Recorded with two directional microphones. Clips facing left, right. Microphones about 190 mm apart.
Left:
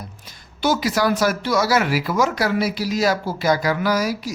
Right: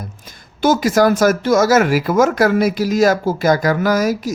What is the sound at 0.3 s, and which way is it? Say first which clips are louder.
Speech: right 5 dB; 50° right (ahead or behind).